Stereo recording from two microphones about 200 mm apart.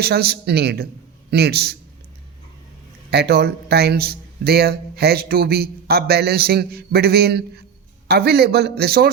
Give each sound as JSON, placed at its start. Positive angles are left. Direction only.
{"t": 0.0, "sound": "a man's voice", "side_deg": -50}
{"t": 3.1, "sound": "a man's voice", "side_deg": -50}